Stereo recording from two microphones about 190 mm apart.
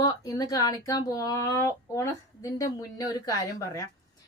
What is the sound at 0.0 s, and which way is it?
A woman's voice, 20° left (ahead or behind).